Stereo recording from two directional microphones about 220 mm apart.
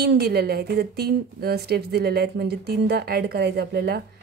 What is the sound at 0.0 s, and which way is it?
A woman's voice, 45° right (ahead or behind).